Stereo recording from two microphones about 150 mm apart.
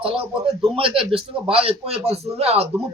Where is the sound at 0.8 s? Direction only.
35° right (ahead or behind).